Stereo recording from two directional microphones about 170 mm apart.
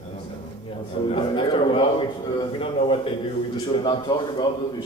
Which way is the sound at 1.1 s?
30° left (ahead or behind).